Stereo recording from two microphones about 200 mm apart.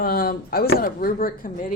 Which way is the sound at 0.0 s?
50° left (ahead or behind).